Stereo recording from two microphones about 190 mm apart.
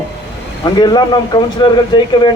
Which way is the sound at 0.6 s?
20° left (ahead or behind).